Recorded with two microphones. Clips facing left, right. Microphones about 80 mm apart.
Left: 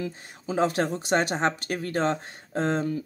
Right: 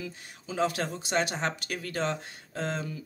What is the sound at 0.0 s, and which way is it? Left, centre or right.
Speech, left.